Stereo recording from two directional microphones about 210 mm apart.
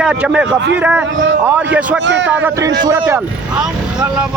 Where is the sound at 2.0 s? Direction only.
60° right (ahead or behind).